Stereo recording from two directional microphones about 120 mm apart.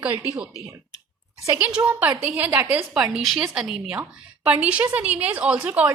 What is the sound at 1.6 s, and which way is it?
A woman's voice, 10° right (ahead or behind).